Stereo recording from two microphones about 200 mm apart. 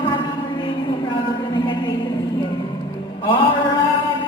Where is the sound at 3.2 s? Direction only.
25° left (ahead or behind).